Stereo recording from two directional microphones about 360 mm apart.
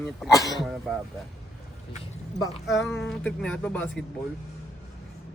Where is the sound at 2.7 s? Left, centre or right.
Centre.